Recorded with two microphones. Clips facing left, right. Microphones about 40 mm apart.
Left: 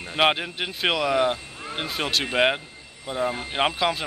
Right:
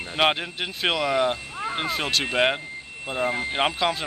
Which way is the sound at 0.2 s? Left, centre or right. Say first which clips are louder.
Left 1 dB; centre.